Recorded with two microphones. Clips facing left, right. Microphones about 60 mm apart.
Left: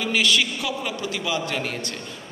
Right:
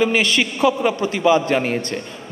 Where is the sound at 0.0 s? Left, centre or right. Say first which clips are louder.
Right 4 dB; right.